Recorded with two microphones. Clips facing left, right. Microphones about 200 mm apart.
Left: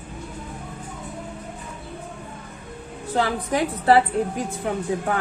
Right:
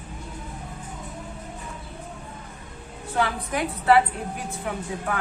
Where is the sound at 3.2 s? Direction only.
35° left (ahead or behind).